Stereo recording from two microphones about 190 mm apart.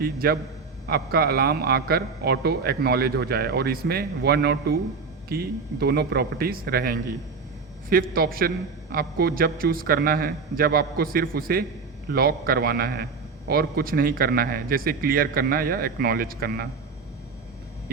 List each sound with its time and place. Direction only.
0.0 s a man's voice: 55° right (ahead or behind)